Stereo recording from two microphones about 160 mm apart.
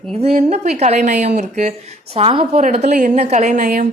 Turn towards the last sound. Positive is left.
turn(degrees=-55)  # may be behind; listen again after turning